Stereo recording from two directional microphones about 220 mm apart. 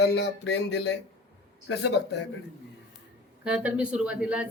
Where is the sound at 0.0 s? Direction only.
50° left (ahead or behind).